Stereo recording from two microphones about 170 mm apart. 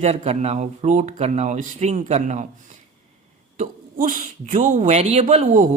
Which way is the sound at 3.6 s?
55° right (ahead or behind).